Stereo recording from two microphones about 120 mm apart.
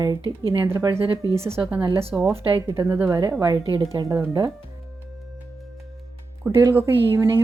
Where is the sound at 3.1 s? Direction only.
30° right (ahead or behind).